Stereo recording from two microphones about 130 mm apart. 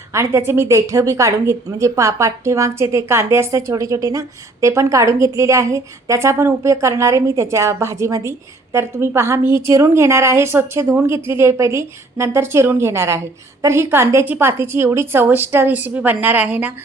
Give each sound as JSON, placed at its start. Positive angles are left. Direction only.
{"t": 0.1, "sound": "a woman's voice", "side_deg": -20}